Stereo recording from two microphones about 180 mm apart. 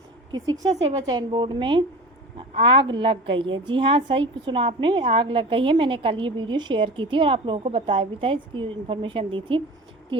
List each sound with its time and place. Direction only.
0.3 s a woman's voice: 20° right (ahead or behind)
2.9 s a woman's voice: 30° right (ahead or behind)